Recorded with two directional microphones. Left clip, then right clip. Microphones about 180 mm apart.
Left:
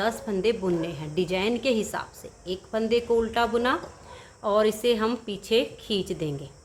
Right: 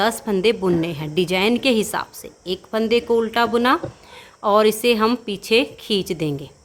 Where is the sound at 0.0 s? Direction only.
45° right (ahead or behind).